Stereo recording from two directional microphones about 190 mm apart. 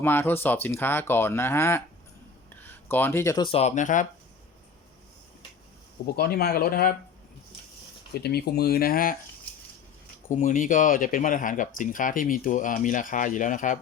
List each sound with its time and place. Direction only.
0.0 s speech: 10° left (ahead or behind); by 4.0 s 40° left (ahead or behind)
6.1 s speech: 55° left (ahead or behind)
8.1 s speech: 60° left (ahead or behind)
10.2 s speech: 40° left (ahead or behind)